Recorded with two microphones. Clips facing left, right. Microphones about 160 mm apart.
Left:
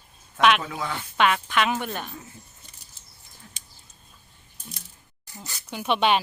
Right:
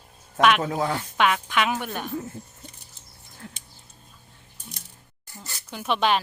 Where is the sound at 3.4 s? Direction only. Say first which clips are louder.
Right 9 dB; 80° right.